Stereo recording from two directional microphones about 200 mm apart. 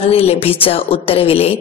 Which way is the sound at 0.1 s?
30° left (ahead or behind).